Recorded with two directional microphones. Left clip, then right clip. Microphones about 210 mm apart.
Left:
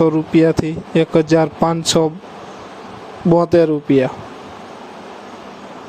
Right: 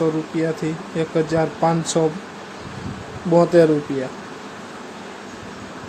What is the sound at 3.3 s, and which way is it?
Speech, 40° left (ahead or behind).